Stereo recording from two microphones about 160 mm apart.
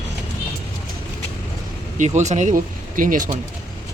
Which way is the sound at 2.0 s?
50° right (ahead or behind).